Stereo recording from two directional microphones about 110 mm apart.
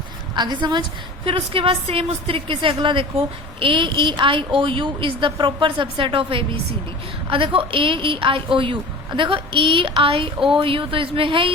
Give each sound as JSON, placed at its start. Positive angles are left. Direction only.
{"t": 0.3, "sound": "a woman's voice", "side_deg": -40}